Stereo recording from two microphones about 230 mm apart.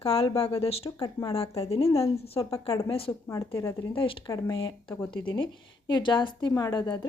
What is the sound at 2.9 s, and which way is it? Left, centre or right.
Speech, left.